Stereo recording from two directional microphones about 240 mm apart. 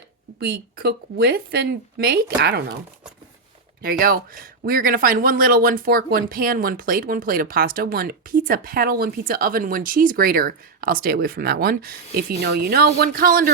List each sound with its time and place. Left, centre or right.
0.3 s speech: right
3.8 s speech: right